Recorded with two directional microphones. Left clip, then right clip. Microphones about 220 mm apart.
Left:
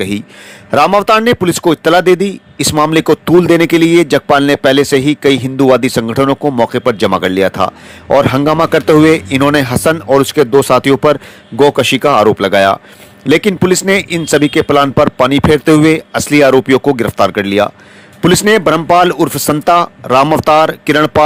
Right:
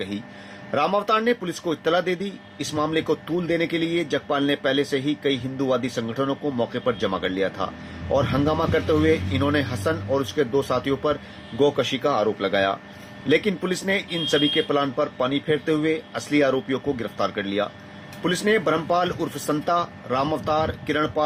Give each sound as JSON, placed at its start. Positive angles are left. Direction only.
{"t": 0.7, "sound": "a man's voice", "side_deg": 50}